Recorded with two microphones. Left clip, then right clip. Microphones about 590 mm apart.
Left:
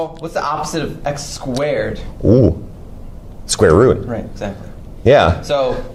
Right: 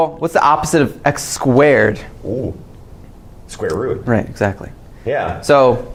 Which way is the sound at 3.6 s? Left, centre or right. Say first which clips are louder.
Left 9 dB; left.